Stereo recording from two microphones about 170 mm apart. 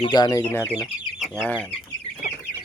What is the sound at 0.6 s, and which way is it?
Speech, 10° right (ahead or behind).